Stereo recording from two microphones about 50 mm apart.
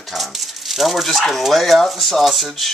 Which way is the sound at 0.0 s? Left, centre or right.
Centre.